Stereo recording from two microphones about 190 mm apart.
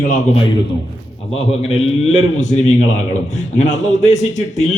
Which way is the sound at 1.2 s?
30° left (ahead or behind).